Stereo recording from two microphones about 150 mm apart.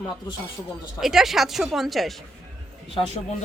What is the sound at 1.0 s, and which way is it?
Speech, centre (ahead or behind).